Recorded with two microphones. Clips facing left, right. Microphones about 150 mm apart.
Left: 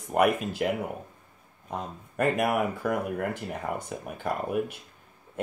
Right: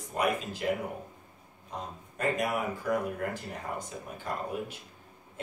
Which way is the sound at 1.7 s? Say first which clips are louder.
Left 5 dB; 60° left (ahead or behind).